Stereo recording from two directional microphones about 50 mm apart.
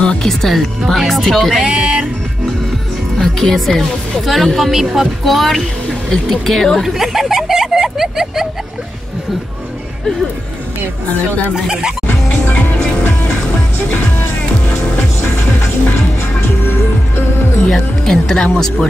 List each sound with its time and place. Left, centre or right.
0.0 s music: centre
0.3 s speech: centre
1.6 s speech: centre
3.2 s speech: centre
5.2 s a sound: centre
11.5 s speech: centre
12.1 s music: left
12.7 s music: left
17.7 s speech: centre